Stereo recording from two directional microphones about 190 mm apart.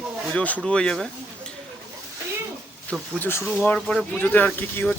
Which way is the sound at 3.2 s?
10° left (ahead or behind).